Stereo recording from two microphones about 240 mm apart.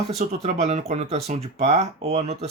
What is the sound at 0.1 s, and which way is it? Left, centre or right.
Speech, right.